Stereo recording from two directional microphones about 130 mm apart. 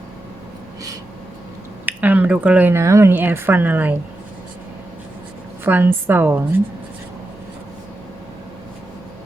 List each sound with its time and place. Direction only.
1.9 s speech: 10° right (ahead or behind)
5.6 s a woman's voice: 15° right (ahead or behind)